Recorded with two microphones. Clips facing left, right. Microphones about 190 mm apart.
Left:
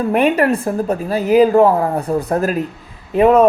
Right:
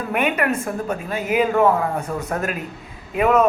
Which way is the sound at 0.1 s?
35° left (ahead or behind).